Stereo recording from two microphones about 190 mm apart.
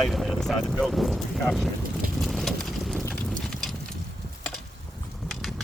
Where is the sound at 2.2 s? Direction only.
Centre (ahead or behind).